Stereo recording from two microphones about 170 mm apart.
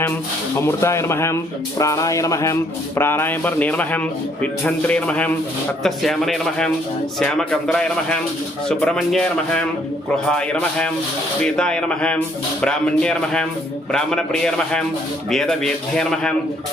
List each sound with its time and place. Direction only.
0.5 s speech: 15° left (ahead or behind)